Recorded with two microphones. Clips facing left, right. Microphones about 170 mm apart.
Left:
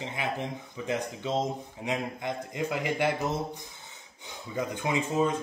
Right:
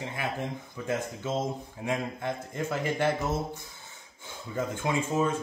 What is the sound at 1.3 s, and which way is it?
Speech, 20° left (ahead or behind).